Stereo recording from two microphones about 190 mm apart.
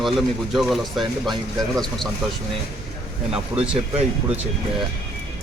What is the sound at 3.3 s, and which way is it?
Speech, 5° right (ahead or behind).